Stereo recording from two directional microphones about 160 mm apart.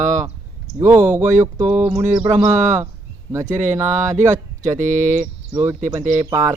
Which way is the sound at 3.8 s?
15° right (ahead or behind).